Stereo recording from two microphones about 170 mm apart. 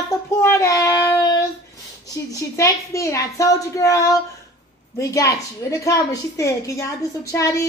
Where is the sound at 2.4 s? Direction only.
20° left (ahead or behind).